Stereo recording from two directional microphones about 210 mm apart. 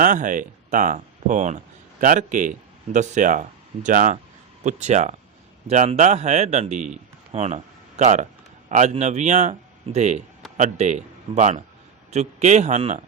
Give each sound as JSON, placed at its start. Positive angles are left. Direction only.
{"t": 0.0, "sound": "speech", "side_deg": -40}